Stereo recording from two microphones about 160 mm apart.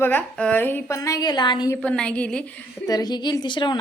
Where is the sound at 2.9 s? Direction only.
25° left (ahead or behind).